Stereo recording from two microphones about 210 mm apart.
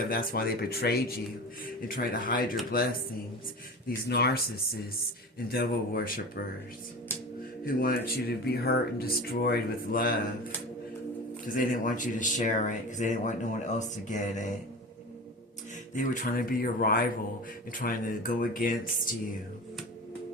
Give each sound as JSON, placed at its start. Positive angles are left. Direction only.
{"t": 0.1, "sound": "speech", "side_deg": 40}
{"t": 3.8, "sound": "speech", "side_deg": 50}
{"t": 7.8, "sound": "speech", "side_deg": 45}
{"t": 11.4, "sound": "speech", "side_deg": 40}
{"t": 16.0, "sound": "speech", "side_deg": 45}